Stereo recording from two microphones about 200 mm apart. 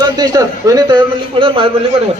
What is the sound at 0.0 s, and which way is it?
A man's voice, 20° right (ahead or behind).